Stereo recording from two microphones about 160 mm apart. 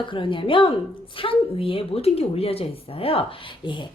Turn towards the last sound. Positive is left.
turn(degrees=30)  # may be behind; listen again after turning